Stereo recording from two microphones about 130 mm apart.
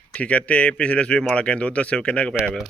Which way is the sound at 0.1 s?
10° left (ahead or behind).